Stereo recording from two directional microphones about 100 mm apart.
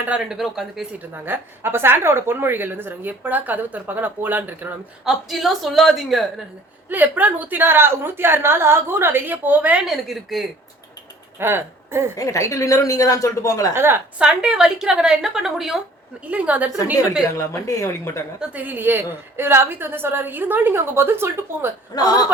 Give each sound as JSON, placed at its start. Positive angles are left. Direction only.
{"t": 0.2, "sound": "a woman's voice", "side_deg": -5}
{"t": 0.9, "sound": "a woman's voice", "side_deg": -20}
{"t": 5.0, "sound": "a woman's voice", "side_deg": -5}
{"t": 6.9, "sound": "a woman's voice", "side_deg": -15}
{"t": 9.8, "sound": "a woman's voice", "side_deg": 0}
{"t": 11.3, "sound": "speech", "side_deg": -25}
{"t": 12.1, "sound": "speech", "side_deg": 35}
{"t": 13.7, "sound": "a woman's voice", "side_deg": -25}
{"t": 14.2, "sound": "a woman's voice", "side_deg": -10}
{"t": 16.2, "sound": "a woman's voice", "side_deg": -15}
{"t": 17.3, "sound": "speech", "side_deg": 30}
{"t": 18.3, "sound": "a woman's voice", "side_deg": -15}
{"t": 21.9, "sound": "speech", "side_deg": 40}